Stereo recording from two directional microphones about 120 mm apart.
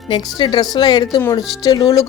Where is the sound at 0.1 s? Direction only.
40° left (ahead or behind).